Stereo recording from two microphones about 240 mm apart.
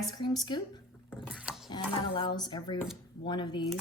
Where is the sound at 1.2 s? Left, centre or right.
Centre.